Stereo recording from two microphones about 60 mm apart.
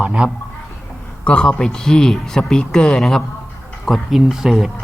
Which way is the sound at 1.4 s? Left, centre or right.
Centre.